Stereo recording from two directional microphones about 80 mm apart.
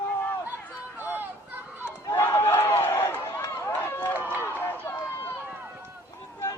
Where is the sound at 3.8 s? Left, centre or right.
Left.